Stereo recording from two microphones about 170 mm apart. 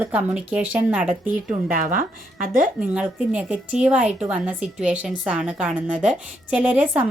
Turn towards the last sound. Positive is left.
turn(degrees=-10)  # may be behind; listen again after turning